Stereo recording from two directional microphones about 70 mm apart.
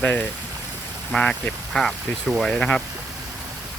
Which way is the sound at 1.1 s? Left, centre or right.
Centre.